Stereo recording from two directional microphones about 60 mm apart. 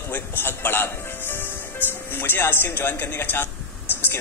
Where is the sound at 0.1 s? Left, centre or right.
Left.